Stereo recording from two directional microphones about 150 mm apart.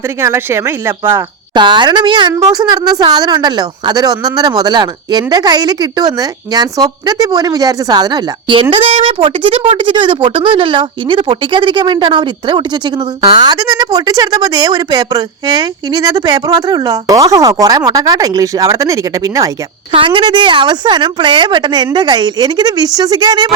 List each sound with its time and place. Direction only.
0.2 s speech: 15° right (ahead or behind)
1.5 s a woman's voice: 30° right (ahead or behind)
19.9 s a woman's voice: 35° right (ahead or behind)